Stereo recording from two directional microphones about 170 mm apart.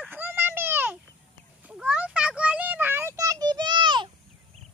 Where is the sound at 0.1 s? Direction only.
10° right (ahead or behind).